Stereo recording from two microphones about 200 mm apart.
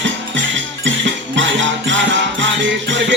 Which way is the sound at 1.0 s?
65° right (ahead or behind).